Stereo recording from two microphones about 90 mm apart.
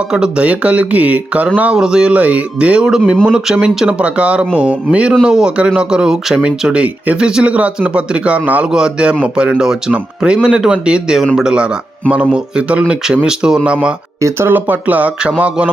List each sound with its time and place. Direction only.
0.1 s speech: 10° right (ahead or behind)
14.2 s speech: 30° right (ahead or behind); by 15.7 s 15° right (ahead or behind)